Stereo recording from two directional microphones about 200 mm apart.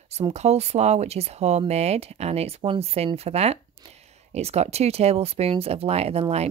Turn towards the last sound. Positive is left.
turn(degrees=-30)  # may be behind; listen again after turning